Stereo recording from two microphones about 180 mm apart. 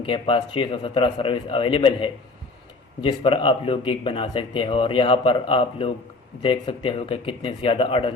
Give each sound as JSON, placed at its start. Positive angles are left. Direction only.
{"t": 0.0, "sound": "a man's voice", "side_deg": 30}